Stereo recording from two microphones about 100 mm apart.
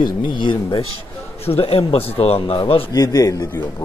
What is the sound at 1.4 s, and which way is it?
Speech, 75° left (ahead or behind).